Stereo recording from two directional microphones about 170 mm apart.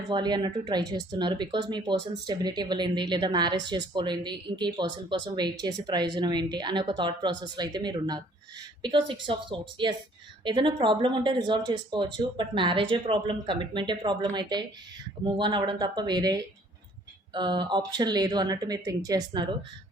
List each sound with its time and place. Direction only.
0.1 s speech: 25° right (ahead or behind)
9.2 s speech: 30° right (ahead or behind)